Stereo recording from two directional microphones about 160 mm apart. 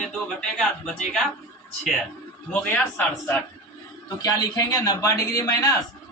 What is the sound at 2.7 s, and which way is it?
Speech, 10° left (ahead or behind).